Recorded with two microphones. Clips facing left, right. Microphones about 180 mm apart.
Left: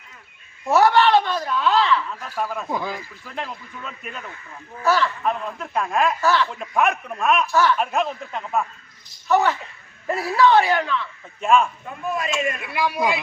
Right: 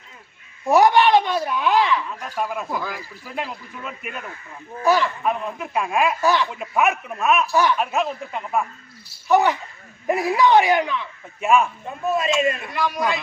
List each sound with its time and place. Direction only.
0.7 s speech: 15° right (ahead or behind)
2.6 s a man's voice: 20° left (ahead or behind)
2.9 s speech: 10° right (ahead or behind)
7.5 s speech: 15° right (ahead or behind)
7.8 s speech: 5° right (ahead or behind)
12.0 s a man's voice: 25° right (ahead or behind)
12.7 s speech: 10° left (ahead or behind)